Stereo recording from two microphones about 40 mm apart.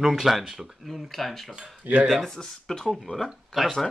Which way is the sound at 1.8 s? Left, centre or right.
Right.